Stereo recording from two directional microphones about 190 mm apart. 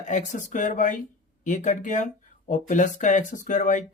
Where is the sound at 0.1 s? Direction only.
40° left (ahead or behind).